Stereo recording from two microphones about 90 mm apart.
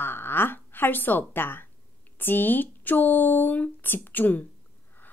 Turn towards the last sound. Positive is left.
turn(degrees=20)  # may be behind; listen again after turning